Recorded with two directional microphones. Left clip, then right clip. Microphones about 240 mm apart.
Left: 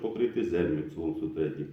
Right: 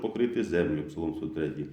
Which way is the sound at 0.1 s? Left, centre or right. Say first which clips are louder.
Even; right.